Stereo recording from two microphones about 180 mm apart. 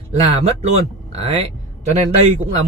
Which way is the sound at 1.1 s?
35° right (ahead or behind).